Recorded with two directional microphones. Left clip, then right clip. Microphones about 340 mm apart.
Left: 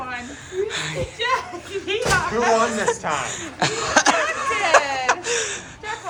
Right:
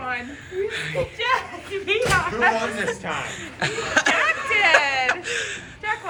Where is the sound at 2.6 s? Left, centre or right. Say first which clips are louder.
Left 5 dB; centre.